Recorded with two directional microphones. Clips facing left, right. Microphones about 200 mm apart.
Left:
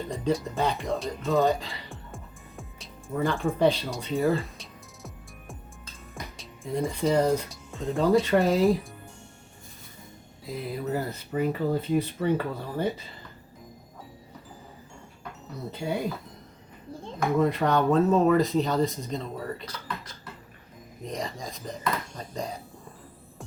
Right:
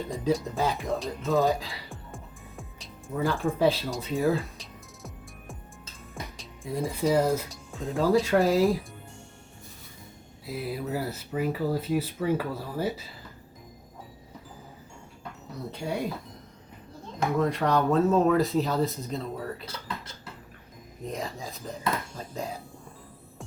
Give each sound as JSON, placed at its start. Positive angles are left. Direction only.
{"t": 0.1, "sound": "music", "side_deg": 0}
{"t": 6.1, "sound": "speech", "side_deg": 0}
{"t": 10.4, "sound": "speech", "side_deg": -5}
{"t": 15.7, "sound": "speech", "side_deg": 0}
{"t": 17.3, "sound": "speech", "side_deg": 0}
{"t": 21.1, "sound": "speech", "side_deg": -5}